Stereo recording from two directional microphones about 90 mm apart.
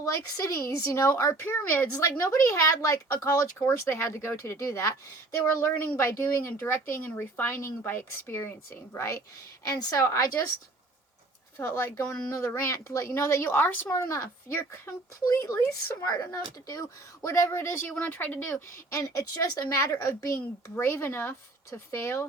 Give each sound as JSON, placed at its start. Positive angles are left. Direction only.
{"t": 0.0, "sound": "speech", "side_deg": 35}
{"t": 1.5, "sound": "speech", "side_deg": 25}
{"t": 2.0, "sound": "speech", "side_deg": 40}
{"t": 11.5, "sound": "speech", "side_deg": 25}
{"t": 15.5, "sound": "speech", "side_deg": 25}
{"t": 16.0, "sound": "speech", "side_deg": 40}
{"t": 17.8, "sound": "speech", "side_deg": 15}
{"t": 18.9, "sound": "speech", "side_deg": 35}